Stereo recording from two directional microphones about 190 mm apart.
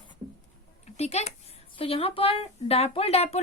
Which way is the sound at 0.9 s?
35° left (ahead or behind).